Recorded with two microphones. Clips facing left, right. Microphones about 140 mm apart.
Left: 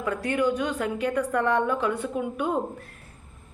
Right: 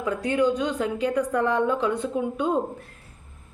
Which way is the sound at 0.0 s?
15° right (ahead or behind).